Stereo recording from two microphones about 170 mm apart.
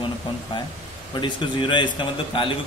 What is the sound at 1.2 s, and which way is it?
Speech, 30° left (ahead or behind).